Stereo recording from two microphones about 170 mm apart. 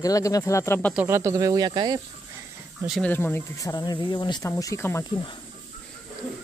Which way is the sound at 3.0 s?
10° left (ahead or behind).